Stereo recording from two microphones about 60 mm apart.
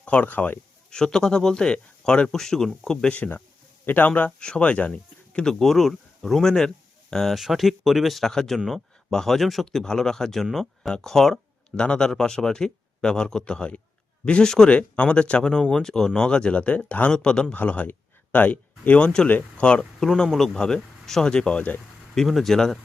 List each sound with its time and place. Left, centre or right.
0.0 s speech: left
0.9 s speech: centre
3.2 s speech: left; by 19.3 s centre
19.3 s speech: left
20.0 s speech: centre